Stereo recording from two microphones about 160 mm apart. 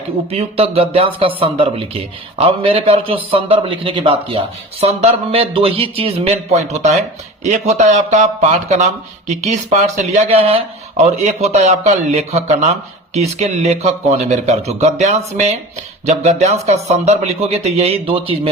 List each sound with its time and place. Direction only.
0.3 s a man's voice: 40° right (ahead or behind)